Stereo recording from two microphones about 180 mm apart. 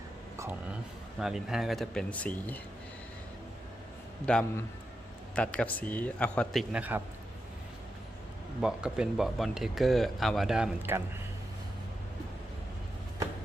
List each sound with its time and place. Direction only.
1.2 s speech: 5° right (ahead or behind)
4.3 s speech: 5° left (ahead or behind)
8.6 s speech: 5° right (ahead or behind)